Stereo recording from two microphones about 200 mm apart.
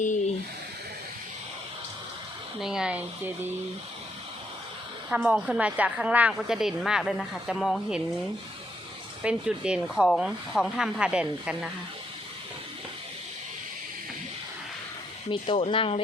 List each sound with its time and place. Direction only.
2.6 s a woman's voice: centre (ahead or behind)
5.0 s a woman's voice: 5° right (ahead or behind)
9.2 s a woman's voice: 5° right (ahead or behind)
15.3 s speech: 30° left (ahead or behind)